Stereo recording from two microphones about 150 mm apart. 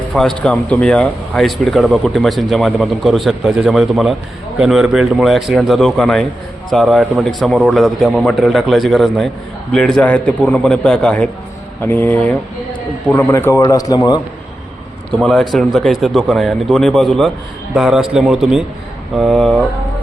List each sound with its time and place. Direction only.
0.1 s a man's voice: 5° left (ahead or behind); by 14.2 s 25° left (ahead or behind)
15.2 s speech: centre (ahead or behind)